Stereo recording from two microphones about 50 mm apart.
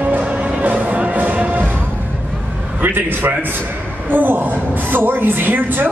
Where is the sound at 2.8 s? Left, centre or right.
Right.